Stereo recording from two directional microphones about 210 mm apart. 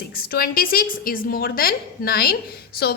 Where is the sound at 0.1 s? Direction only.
45° left (ahead or behind).